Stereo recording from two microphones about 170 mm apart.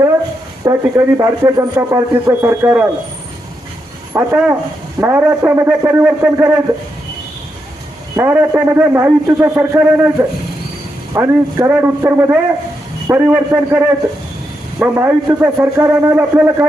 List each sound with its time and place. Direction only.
0.6 s speech: 20° right (ahead or behind)
4.1 s speech: 15° right (ahead or behind)
8.1 s speech: 15° right (ahead or behind)